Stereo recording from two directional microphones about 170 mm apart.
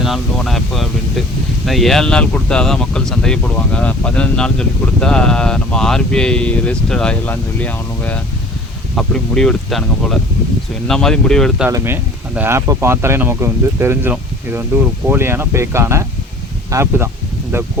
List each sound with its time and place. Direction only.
0.0 s speech: centre (ahead or behind)
12.3 s speech: 10° right (ahead or behind)